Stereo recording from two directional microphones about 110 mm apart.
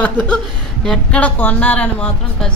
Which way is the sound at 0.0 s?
10° left (ahead or behind).